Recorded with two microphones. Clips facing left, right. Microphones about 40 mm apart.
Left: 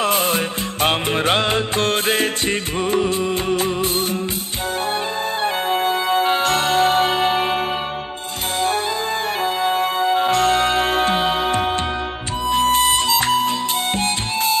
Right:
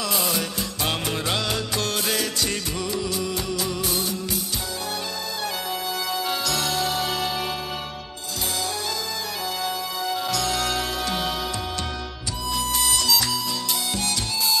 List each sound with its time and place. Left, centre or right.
0.0 s music: left
5.4 s music: left
9.6 s music: left